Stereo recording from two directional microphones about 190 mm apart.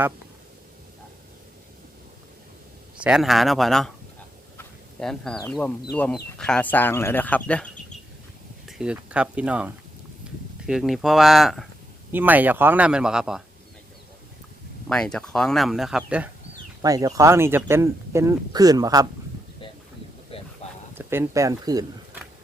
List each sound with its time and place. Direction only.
3.0 s speech: centre (ahead or behind)
4.9 s speech: 5° left (ahead or behind)
8.6 s speech: 5° right (ahead or behind)
14.8 s speech: 5° left (ahead or behind)
16.8 s speech: 20° right (ahead or behind)
20.3 s a sound: 30° left (ahead or behind)
21.0 s speech: 10° right (ahead or behind)